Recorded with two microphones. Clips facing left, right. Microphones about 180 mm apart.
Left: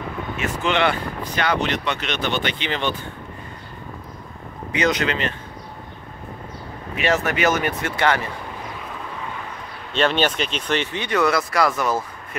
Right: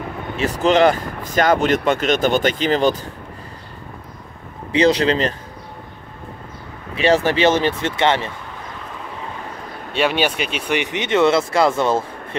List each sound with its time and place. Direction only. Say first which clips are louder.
0.4 s speech: right 7 dB; 40° right (ahead or behind)
4.7 s speech: right 6 dB; 30° right (ahead or behind)
7.0 s speech: right 5 dB; 30° right (ahead or behind)
9.9 s speech: right 1 dB; 10° right (ahead or behind); by 12.4 s 25° right (ahead or behind)